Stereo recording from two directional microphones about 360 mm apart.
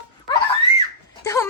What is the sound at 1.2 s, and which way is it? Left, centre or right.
Speech, centre.